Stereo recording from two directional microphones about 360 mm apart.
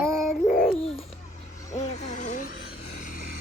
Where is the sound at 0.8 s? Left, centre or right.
Centre.